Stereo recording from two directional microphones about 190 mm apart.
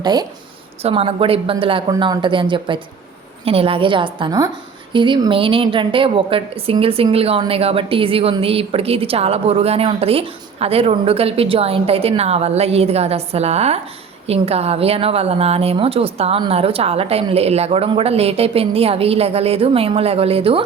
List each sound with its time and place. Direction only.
0.0 s speech: 20° right (ahead or behind)
0.8 s a woman's voice: 30° right (ahead or behind)